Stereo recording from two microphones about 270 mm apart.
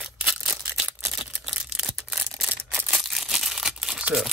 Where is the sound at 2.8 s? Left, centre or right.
Centre.